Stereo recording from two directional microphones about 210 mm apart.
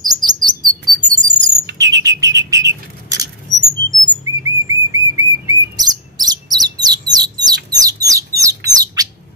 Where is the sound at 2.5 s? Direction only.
15° right (ahead or behind).